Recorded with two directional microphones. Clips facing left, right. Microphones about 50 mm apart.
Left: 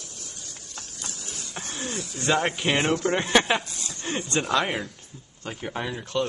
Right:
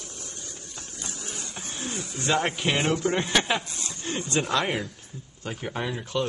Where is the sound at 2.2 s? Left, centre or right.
Centre.